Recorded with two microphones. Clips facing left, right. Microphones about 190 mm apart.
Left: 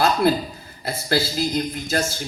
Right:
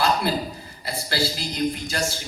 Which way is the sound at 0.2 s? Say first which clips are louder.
Left 6 dB; 50° left (ahead or behind).